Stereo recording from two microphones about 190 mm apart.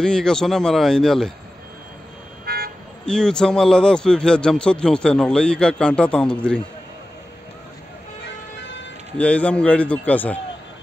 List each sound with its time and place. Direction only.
0.0 s a man's voice: 5° left (ahead or behind)
2.4 s car alarm: 50° right (ahead or behind)
3.1 s a man's voice: 5° left (ahead or behind)
8.2 s vehicle: 70° left (ahead or behind)
9.2 s a man's voice: 5° left (ahead or behind)